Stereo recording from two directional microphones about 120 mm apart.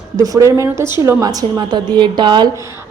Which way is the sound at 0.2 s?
25° right (ahead or behind).